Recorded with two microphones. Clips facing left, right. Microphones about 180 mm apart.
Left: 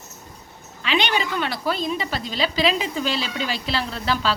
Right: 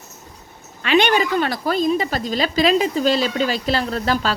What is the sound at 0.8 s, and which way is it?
A woman's voice, 50° right (ahead or behind).